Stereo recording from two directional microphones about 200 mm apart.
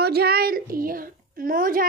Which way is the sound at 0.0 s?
50° right (ahead or behind).